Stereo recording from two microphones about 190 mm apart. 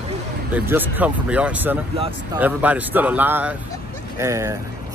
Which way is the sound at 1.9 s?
30° right (ahead or behind).